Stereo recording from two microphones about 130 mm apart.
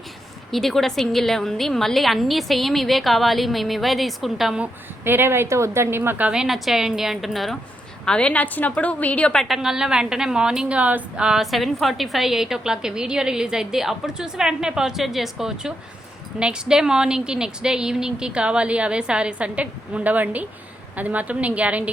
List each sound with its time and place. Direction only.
0.5 s a woman's voice: centre (ahead or behind)